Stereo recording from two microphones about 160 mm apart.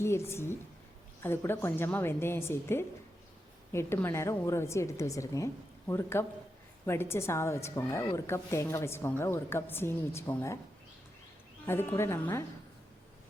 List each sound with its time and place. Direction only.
0.0 s a woman's voice: 15° left (ahead or behind)
11.6 s a woman's voice: 15° left (ahead or behind)